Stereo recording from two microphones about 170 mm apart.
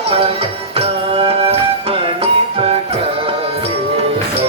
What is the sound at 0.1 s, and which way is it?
Music, 35° right (ahead or behind).